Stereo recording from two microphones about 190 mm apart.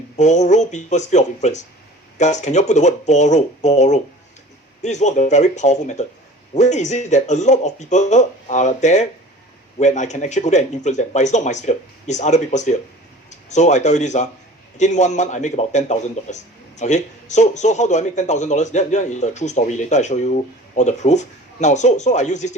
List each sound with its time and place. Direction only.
0.2 s a man's voice: 40° left (ahead or behind)